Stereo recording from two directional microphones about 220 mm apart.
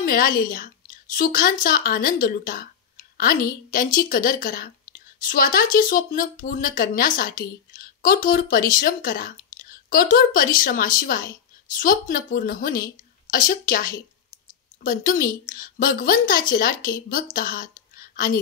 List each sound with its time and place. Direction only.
0.0 s a woman's voice: 40° left (ahead or behind)